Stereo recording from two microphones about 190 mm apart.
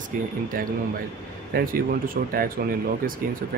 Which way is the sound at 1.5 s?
50° right (ahead or behind).